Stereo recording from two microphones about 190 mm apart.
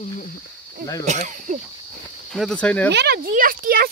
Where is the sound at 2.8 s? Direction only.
60° right (ahead or behind).